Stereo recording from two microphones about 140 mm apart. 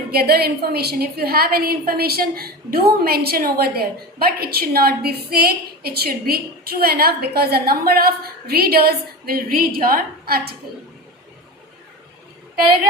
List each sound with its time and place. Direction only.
0.1 s a woman's voice: 90° right